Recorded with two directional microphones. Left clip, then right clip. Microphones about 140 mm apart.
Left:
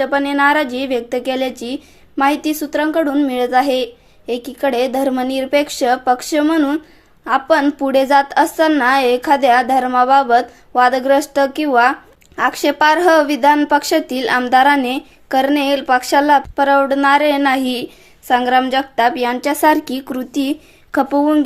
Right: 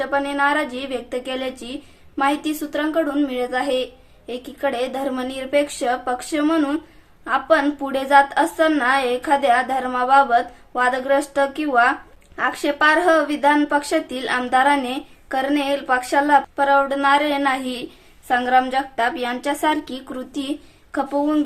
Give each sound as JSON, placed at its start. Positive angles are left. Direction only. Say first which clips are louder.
{"t": 0.0, "sound": "a woman's voice", "louder": "left 5 dB", "side_deg": 45}
{"t": 7.3, "sound": "a woman's voice", "louder": "left 4 dB", "side_deg": 45}